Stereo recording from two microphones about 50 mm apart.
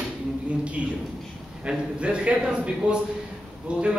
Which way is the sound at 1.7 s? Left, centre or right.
Right.